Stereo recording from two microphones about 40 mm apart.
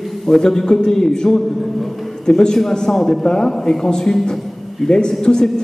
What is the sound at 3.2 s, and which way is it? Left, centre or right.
Speech, centre.